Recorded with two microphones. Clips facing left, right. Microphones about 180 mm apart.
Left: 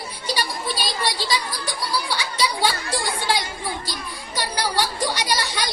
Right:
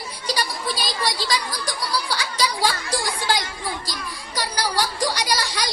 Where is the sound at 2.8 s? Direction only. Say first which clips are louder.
Even; 25° left (ahead or behind).